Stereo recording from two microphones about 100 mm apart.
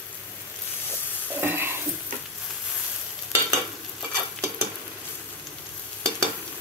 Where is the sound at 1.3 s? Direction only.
20° right (ahead or behind).